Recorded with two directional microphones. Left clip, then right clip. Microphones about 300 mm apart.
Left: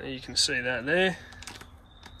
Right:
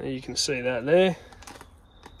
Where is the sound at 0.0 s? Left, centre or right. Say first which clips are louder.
Left 1 dB; right.